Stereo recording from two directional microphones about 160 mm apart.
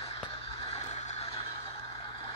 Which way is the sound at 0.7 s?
40° left (ahead or behind).